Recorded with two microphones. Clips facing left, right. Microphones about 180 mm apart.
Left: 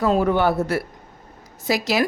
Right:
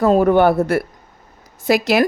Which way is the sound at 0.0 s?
50° right (ahead or behind).